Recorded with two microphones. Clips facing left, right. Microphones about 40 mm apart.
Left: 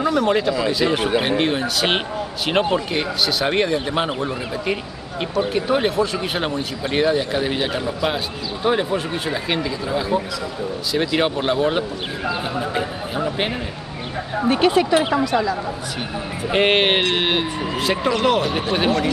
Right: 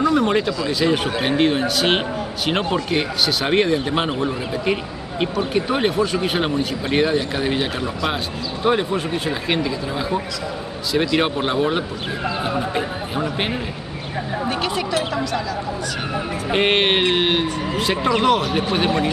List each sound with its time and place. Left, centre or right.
0.1 s speech: centre
14.5 s speech: centre
16.4 s speech: centre